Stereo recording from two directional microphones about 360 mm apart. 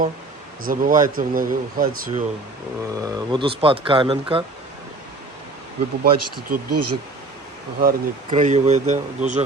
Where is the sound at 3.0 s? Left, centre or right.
Centre.